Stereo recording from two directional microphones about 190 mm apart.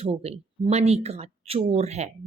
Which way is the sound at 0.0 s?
30° right (ahead or behind).